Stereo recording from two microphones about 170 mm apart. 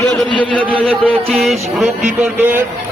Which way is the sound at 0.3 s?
30° right (ahead or behind).